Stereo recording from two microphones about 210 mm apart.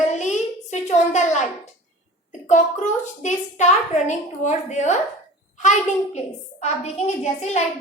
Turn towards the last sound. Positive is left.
turn(degrees=30)  # may be behind; listen again after turning